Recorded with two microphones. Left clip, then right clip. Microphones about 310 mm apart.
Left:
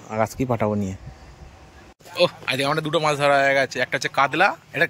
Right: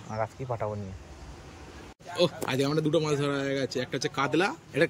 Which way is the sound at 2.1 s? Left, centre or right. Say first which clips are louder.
Left 6 dB; centre.